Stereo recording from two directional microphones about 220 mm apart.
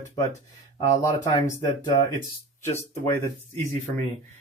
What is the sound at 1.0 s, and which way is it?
Speech, 15° left (ahead or behind).